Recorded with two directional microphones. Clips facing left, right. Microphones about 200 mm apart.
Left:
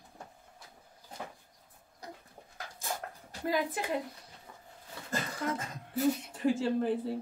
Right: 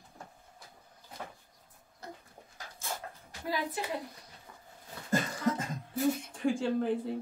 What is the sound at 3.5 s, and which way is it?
Speech, 50° left (ahead or behind).